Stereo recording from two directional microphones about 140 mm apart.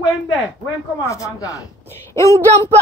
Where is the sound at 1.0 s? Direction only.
25° left (ahead or behind).